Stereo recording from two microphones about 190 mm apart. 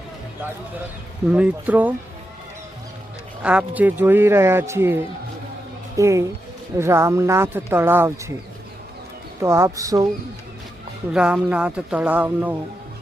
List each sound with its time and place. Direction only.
1.3 s speech: 5° right (ahead or behind)
3.4 s speech: 5° right (ahead or behind)
6.0 s speech: 15° right (ahead or behind)
9.4 s speech: 15° right (ahead or behind)
11.1 s speech: 5° right (ahead or behind)